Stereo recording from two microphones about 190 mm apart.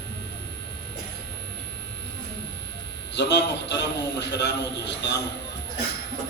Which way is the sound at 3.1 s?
65° left (ahead or behind).